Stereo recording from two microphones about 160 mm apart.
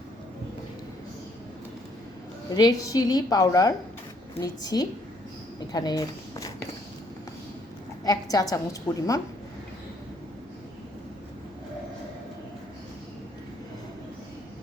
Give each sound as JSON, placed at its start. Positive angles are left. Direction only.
{"t": 2.6, "sound": "a woman's voice", "side_deg": 25}
{"t": 8.0, "sound": "a woman's voice", "side_deg": 25}